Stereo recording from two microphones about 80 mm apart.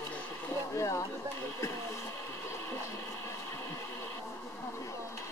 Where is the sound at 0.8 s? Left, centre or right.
Left.